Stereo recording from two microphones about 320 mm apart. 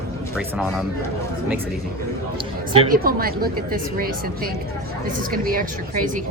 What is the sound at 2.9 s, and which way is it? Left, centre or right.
Speech, right.